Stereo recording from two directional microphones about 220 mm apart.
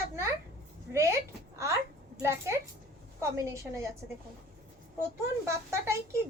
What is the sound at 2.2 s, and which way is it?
A woman's voice, 10° right (ahead or behind).